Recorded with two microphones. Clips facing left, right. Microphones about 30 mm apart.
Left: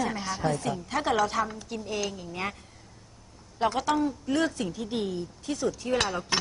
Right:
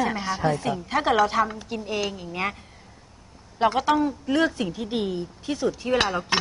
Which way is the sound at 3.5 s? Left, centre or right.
Right.